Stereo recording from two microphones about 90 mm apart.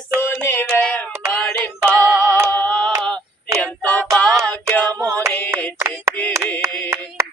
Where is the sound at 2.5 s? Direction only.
20° left (ahead or behind).